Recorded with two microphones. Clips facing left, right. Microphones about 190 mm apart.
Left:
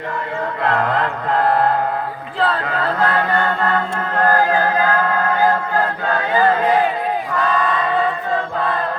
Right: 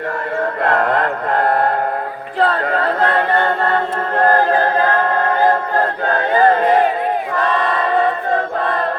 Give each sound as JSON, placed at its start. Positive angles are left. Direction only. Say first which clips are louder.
{"t": 0.6, "sound": "music", "louder": "right 2 dB", "side_deg": -50}
{"t": 2.4, "sound": "choir", "louder": "right 3 dB", "side_deg": -45}